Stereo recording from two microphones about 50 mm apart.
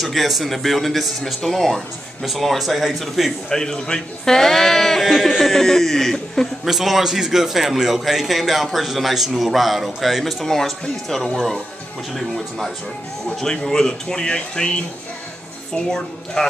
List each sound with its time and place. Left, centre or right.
0.0 s a man's voice: centre
3.4 s a man's voice: centre
13.4 s a man's voice: centre